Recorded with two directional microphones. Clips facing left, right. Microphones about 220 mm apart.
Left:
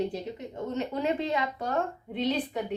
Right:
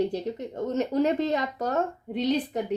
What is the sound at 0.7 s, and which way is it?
Speech, 40° right (ahead or behind).